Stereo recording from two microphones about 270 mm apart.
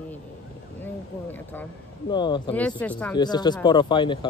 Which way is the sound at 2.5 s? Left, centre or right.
Centre.